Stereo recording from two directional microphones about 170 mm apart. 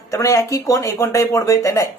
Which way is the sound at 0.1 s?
20° left (ahead or behind).